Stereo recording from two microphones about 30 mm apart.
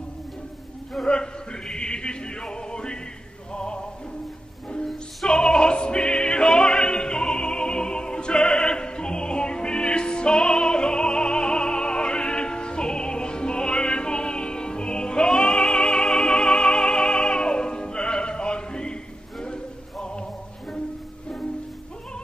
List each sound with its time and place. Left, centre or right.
1.0 s music: left
5.2 s opera: left
19.4 s music: left